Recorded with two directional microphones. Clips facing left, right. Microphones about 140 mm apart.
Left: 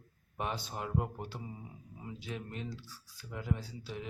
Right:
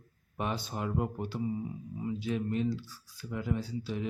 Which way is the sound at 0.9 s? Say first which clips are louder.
Right 1 dB; 5° right (ahead or behind).